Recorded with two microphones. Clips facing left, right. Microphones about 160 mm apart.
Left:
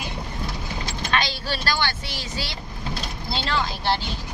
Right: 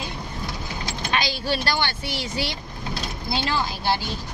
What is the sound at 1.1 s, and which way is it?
Vehicle, 15° right (ahead or behind).